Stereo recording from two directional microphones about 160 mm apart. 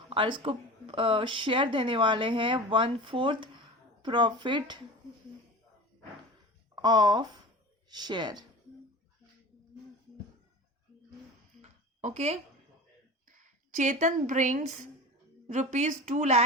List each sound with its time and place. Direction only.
0.1 s speech: 30° right (ahead or behind)
6.7 s speech: 25° right (ahead or behind)
11.6 s a sound: 45° right (ahead or behind)
13.2 s a woman's voice: 55° right (ahead or behind)